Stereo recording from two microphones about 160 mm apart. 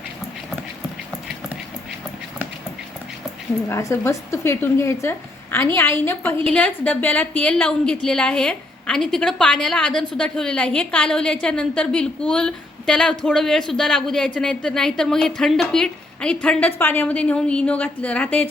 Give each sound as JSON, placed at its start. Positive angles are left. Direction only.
{"t": 3.7, "sound": "a woman's voice", "side_deg": 20}